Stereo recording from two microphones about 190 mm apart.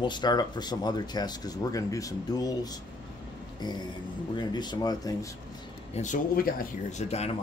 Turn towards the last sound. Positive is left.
turn(degrees=35)  # may be behind; listen again after turning